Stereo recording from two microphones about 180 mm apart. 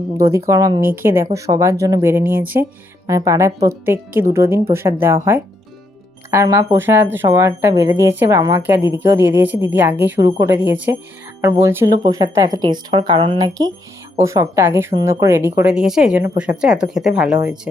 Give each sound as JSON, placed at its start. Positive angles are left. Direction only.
{"t": 0.2, "sound": "speech", "side_deg": -15}